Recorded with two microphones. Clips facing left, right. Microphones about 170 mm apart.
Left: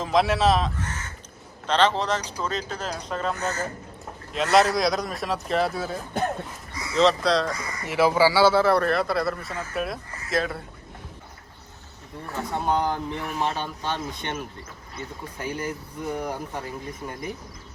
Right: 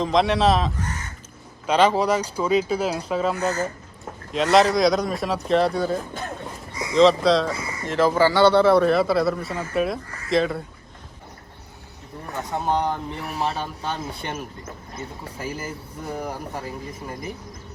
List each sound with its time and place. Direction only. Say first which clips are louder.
0.0 s a man's voice: right 2 dB; 5° left (ahead or behind)
1.6 s a man's voice: right 4 dB; 10° right (ahead or behind)
12.5 s a man's voice: right 1 dB; centre (ahead or behind)
13.1 s speech: right 1 dB; 35° right (ahead or behind)
13.6 s a man's voice: right 1 dB; centre (ahead or behind)
15.4 s a man's voice: left 1 dB; 5° right (ahead or behind)